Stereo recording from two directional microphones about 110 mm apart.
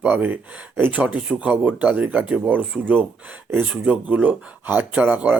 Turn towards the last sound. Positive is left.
turn(degrees=-15)  # may be behind; listen again after turning